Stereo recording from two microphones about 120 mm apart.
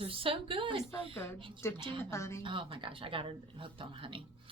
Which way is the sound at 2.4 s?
45° right (ahead or behind).